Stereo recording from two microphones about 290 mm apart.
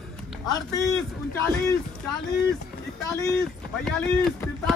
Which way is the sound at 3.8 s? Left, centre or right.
Centre.